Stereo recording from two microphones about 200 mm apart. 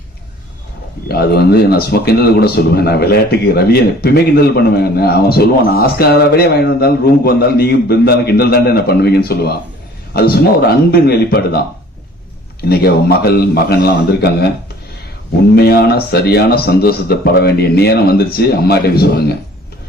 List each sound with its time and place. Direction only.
1.0 s a man's voice: 50° left (ahead or behind)
12.6 s a man's voice: 50° left (ahead or behind)
15.5 s a man's voice: 55° left (ahead or behind)